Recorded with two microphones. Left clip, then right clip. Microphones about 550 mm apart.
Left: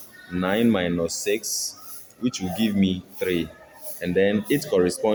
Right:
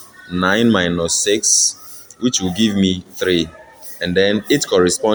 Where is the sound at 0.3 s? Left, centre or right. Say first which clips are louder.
Right 7 dB; left.